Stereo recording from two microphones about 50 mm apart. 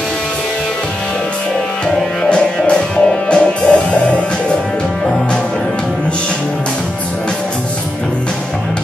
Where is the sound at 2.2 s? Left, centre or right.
Left.